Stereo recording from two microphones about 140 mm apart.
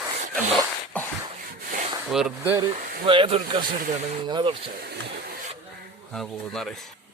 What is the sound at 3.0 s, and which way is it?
A man's voice, 40° right (ahead or behind).